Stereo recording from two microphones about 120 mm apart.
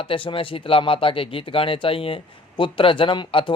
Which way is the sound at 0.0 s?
45° left (ahead or behind).